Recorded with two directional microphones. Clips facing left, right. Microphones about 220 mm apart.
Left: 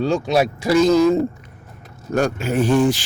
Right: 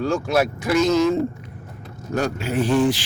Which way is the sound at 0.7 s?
35° left (ahead or behind).